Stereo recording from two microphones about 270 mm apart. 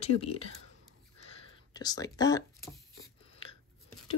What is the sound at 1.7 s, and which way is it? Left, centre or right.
Speech, centre.